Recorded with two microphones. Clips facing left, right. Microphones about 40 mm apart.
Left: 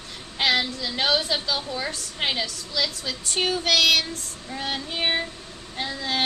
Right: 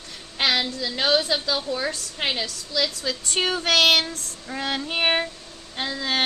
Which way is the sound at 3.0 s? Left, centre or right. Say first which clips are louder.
Right 2 dB; right.